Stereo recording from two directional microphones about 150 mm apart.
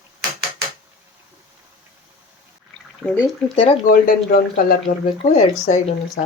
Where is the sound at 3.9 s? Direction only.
70° left (ahead or behind).